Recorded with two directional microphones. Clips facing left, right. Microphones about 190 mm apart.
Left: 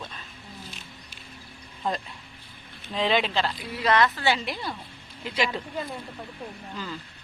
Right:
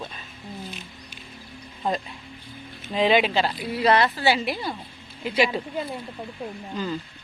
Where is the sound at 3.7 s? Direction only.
35° right (ahead or behind).